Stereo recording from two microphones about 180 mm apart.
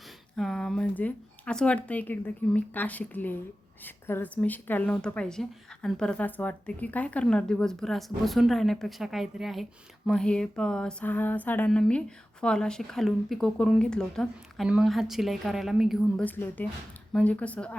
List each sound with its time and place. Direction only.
0.3 s speech: centre (ahead or behind)
3.8 s a sound: 10° left (ahead or behind)
16.2 s speech: 10° left (ahead or behind)